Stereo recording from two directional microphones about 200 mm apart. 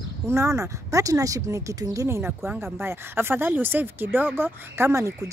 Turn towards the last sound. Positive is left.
turn(degrees=-15)  # may be behind; listen again after turning